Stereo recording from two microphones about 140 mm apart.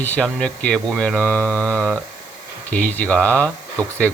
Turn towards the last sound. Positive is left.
turn(degrees=10)  # may be behind; listen again after turning